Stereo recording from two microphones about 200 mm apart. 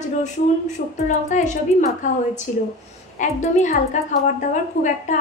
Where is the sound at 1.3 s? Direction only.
35° left (ahead or behind).